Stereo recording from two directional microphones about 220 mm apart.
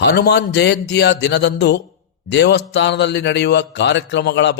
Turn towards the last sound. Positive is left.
turn(degrees=50)  # may be behind; listen again after turning